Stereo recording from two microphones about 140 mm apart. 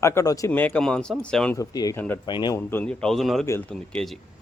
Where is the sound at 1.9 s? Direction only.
15° left (ahead or behind).